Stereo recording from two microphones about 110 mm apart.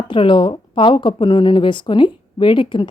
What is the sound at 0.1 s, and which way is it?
Speech, 50° left (ahead or behind).